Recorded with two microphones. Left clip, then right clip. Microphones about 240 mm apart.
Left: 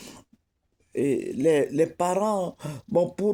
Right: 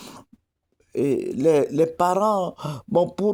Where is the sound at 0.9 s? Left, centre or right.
Right.